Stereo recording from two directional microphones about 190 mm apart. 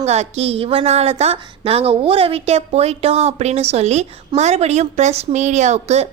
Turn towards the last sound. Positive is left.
turn(degrees=-35)  # may be behind; listen again after turning